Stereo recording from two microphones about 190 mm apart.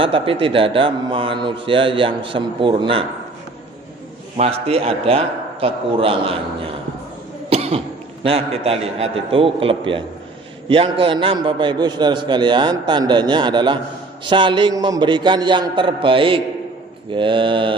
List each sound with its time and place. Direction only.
0.0 s a man's voice: 30° right (ahead or behind)
4.4 s a man's voice: 30° right (ahead or behind)
7.5 s cough: 30° right (ahead or behind)
8.2 s a man's voice: 30° right (ahead or behind)